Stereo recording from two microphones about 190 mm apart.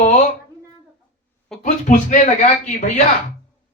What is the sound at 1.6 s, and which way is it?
Speech, 40° left (ahead or behind).